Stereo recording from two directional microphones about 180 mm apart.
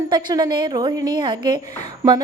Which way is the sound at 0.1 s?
25° right (ahead or behind).